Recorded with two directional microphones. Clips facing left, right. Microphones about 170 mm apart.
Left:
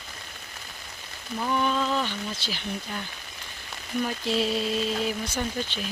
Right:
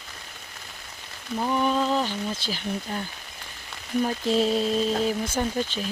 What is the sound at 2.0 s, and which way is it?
Speech, 40° right (ahead or behind).